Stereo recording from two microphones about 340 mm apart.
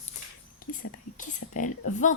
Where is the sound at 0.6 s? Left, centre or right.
Left.